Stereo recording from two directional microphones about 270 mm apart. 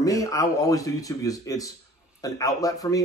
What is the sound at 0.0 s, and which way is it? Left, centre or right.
Speech, centre.